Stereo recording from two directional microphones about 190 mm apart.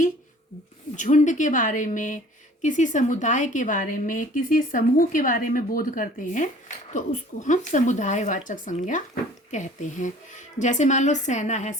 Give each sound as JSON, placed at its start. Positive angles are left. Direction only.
{"t": 0.9, "sound": "a woman's voice", "side_deg": 40}